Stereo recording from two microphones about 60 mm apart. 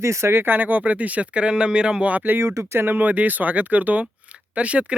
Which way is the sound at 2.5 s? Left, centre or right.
Right.